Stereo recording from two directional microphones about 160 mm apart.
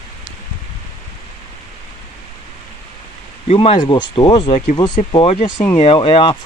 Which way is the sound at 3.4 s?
40° left (ahead or behind).